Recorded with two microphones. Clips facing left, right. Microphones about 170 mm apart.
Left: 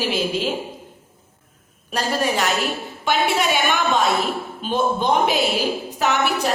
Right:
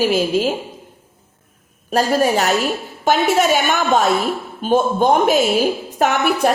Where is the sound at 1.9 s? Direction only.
40° right (ahead or behind).